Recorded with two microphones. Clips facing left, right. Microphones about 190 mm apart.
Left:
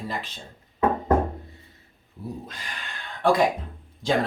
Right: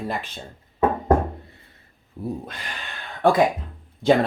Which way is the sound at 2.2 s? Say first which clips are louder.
Right 6 dB; 50° right (ahead or behind).